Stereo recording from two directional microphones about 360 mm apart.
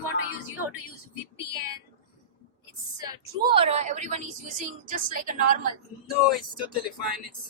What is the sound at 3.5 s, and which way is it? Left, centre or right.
A woman's voice, centre.